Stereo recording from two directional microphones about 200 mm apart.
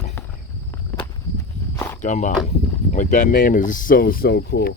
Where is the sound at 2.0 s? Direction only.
40° left (ahead or behind).